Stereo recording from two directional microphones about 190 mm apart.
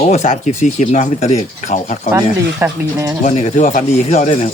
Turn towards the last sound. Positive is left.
turn(degrees=40)  # may be behind; listen again after turning